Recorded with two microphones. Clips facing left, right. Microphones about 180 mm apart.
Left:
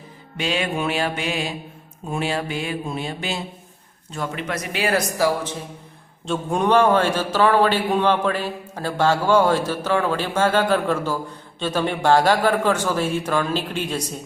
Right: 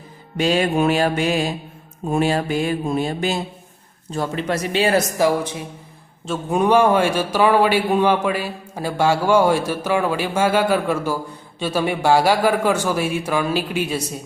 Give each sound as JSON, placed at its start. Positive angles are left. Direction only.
{"t": 0.3, "sound": "music", "side_deg": -40}
{"t": 2.0, "sound": "speech", "side_deg": -45}
{"t": 6.2, "sound": "a man's voice", "side_deg": -5}